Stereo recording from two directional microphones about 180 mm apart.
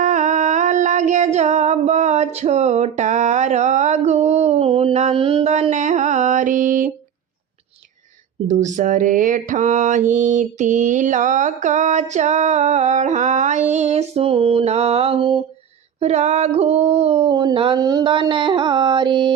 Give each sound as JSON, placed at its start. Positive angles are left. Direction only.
{"t": 0.0, "sound": "female singing", "side_deg": -45}
{"t": 8.4, "sound": "mantra", "side_deg": -45}
{"t": 16.0, "sound": "a sound", "side_deg": -35}